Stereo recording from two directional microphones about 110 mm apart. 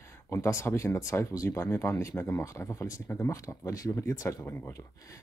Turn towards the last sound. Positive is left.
turn(degrees=20)  # may be behind; listen again after turning